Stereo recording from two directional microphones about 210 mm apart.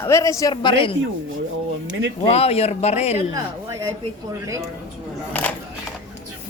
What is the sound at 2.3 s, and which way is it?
Speech, 30° left (ahead or behind).